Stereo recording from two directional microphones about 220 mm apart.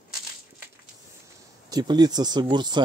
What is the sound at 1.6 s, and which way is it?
Speech, 20° right (ahead or behind).